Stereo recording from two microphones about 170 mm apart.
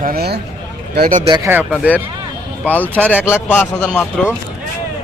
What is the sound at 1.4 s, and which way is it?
Speech, 10° right (ahead or behind).